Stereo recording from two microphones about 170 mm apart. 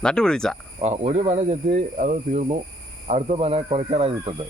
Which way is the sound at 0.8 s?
40° right (ahead or behind).